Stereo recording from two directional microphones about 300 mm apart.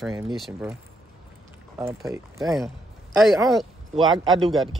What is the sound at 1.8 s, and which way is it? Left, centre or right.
Speech, centre.